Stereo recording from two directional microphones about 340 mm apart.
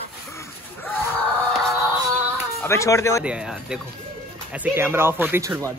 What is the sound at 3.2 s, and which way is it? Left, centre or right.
Speech, centre.